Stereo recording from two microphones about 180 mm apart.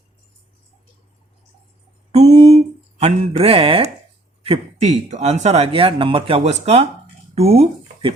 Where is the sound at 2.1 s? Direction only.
35° right (ahead or behind).